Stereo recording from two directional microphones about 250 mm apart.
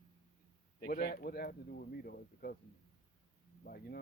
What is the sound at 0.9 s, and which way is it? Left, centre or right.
Speech, left.